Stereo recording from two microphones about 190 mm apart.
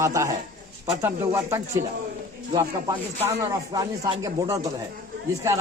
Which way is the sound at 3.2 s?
15° right (ahead or behind).